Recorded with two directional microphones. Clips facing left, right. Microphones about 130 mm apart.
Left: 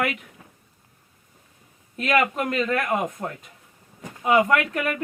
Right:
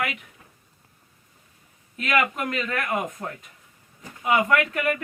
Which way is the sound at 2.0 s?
35° left (ahead or behind).